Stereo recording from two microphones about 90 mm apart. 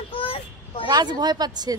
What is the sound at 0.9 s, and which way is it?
Speech, 50° right (ahead or behind).